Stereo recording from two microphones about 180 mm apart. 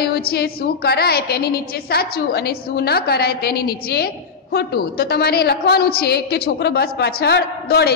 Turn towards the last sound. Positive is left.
turn(degrees=60)  # may be behind; listen again after turning